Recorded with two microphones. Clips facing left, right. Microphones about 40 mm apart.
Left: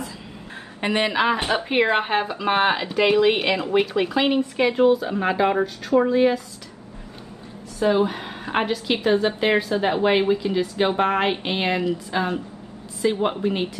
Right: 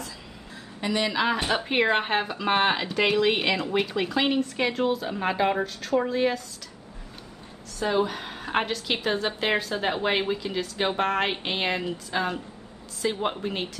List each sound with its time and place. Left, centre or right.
0.7 s a woman's voice: left
1.1 s a woman's voice: centre
1.7 s speech: centre
3.4 s speech: left
3.8 s a woman's voice: centre
7.9 s a woman's voice: centre